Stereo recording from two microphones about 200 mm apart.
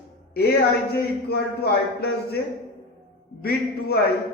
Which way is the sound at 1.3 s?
50° left (ahead or behind).